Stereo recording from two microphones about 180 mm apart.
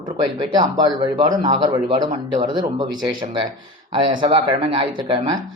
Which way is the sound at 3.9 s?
30° right (ahead or behind).